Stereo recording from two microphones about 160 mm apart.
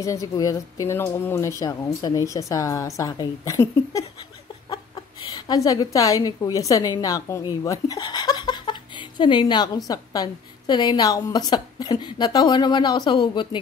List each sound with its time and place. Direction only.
0.0 s speech: 20° left (ahead or behind)
5.5 s speech: 25° left (ahead or behind)
7.6 s a sound: 20° left (ahead or behind)
9.8 s speech: 25° left (ahead or behind)